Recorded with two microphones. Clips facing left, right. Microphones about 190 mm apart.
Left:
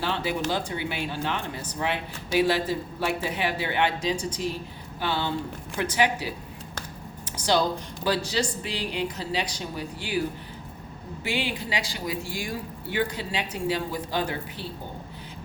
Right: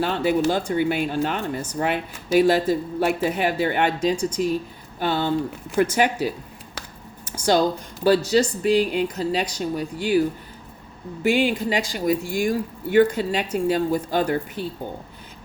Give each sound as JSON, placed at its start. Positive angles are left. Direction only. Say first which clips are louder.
{"t": 0.0, "sound": "speech", "louder": "right 7 dB", "side_deg": -45}
{"t": 7.3, "sound": "a sound", "louder": "right 5 dB", "side_deg": -45}
{"t": 8.0, "sound": "speech", "louder": "right 9 dB", "side_deg": -45}
{"t": 11.2, "sound": "speech", "louder": "right 10 dB", "side_deg": -45}